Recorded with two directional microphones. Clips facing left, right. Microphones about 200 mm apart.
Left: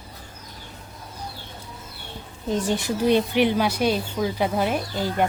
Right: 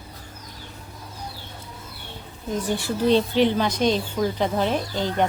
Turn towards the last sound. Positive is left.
turn(degrees=10)  # may be behind; listen again after turning